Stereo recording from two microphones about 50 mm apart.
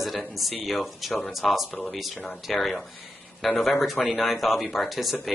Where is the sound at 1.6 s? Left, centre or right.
Left.